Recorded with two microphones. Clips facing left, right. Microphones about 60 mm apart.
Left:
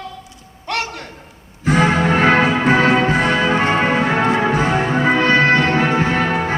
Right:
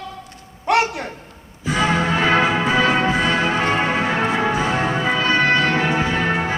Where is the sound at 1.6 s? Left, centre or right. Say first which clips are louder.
Left 4 dB; left.